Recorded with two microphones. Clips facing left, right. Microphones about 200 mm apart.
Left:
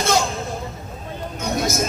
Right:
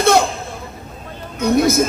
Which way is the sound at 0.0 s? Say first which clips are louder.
Right 6 dB; 60° right (ahead or behind).